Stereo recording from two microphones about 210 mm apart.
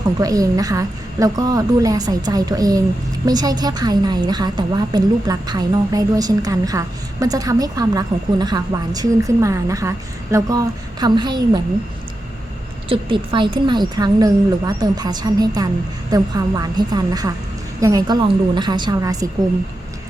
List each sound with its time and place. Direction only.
0.2 s a woman's voice: 15° right (ahead or behind)
12.9 s a woman's voice: 25° right (ahead or behind)